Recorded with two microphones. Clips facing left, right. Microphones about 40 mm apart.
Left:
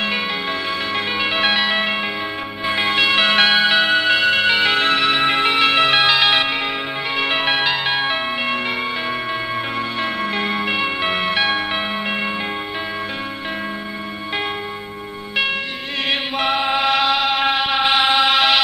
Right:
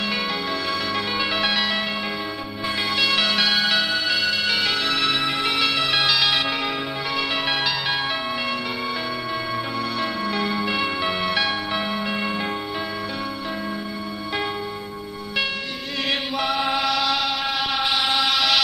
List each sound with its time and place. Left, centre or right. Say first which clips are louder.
0.0 s music: left 3 dB; left
16.1 s chant: left 4 dB; left